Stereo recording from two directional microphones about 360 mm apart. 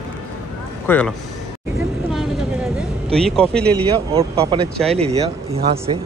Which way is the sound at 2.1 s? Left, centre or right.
Centre.